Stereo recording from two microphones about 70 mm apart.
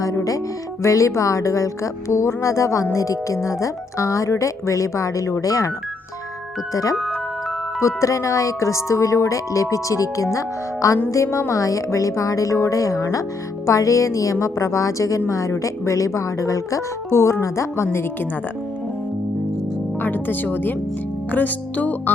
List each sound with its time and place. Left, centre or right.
0.0 s speech: left
7.8 s speech: left
20.0 s speech: left